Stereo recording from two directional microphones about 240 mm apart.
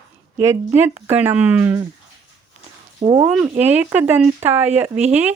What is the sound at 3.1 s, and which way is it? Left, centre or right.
Speech, centre.